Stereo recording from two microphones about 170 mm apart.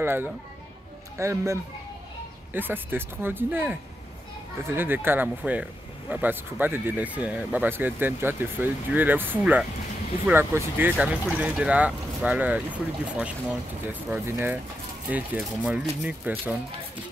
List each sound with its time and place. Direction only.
0.0 s speech: 10° right (ahead or behind)